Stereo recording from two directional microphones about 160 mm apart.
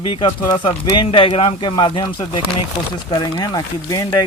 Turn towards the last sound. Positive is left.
turn(degrees=20)  # may be behind; listen again after turning